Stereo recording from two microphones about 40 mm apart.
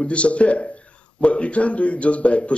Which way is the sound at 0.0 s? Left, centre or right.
Left.